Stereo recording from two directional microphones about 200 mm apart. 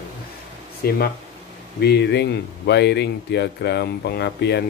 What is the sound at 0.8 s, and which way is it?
Speech, 55° left (ahead or behind).